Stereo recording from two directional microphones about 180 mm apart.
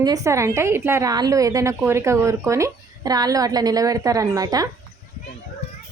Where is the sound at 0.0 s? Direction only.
20° right (ahead or behind).